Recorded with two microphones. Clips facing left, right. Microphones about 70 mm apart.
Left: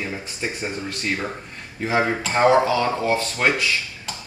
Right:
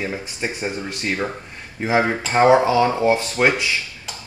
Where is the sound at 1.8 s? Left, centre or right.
Centre.